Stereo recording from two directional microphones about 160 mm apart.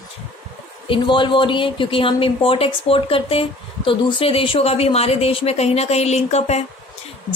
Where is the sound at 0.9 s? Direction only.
30° left (ahead or behind).